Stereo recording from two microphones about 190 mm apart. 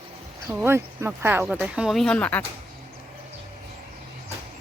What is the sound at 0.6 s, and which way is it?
Speech, 10° right (ahead or behind).